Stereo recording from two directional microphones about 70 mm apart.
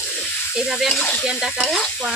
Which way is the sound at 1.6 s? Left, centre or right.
Centre.